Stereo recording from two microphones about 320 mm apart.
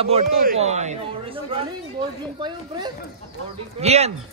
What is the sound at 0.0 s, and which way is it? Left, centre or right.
Speech, right.